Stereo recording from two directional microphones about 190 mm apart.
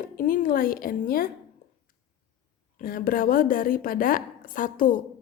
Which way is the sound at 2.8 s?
50° left (ahead or behind).